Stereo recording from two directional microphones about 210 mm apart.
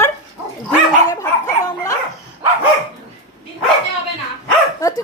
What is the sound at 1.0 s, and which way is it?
Dog, 15° left (ahead or behind).